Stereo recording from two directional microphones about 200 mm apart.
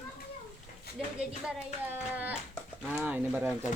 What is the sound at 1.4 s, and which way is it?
Speech, 5° right (ahead or behind).